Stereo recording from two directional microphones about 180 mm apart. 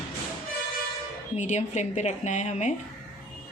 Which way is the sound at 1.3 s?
40° left (ahead or behind).